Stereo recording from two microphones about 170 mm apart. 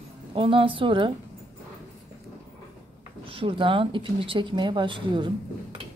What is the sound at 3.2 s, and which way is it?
Speech, 30° right (ahead or behind).